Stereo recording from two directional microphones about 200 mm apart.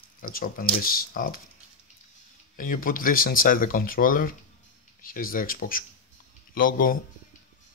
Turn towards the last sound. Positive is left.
turn(degrees=45)  # may be behind; listen again after turning